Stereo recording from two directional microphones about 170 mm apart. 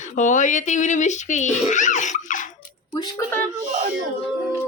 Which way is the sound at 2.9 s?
25° left (ahead or behind).